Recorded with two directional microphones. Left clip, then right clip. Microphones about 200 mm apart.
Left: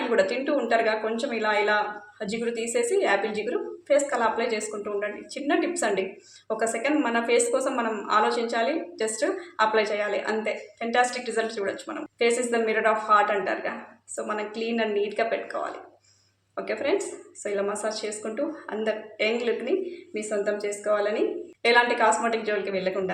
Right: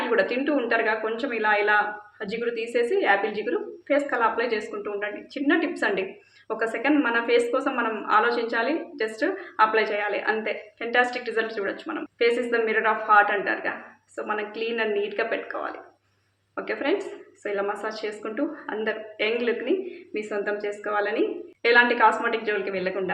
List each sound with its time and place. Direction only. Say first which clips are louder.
0.2 s a woman's voice: even; 5° left (ahead or behind)